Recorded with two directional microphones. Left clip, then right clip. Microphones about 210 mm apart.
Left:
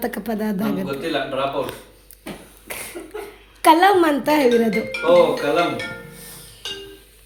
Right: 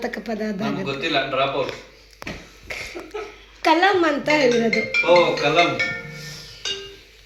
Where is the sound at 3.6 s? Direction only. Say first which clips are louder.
Left 4 dB; 60° left (ahead or behind).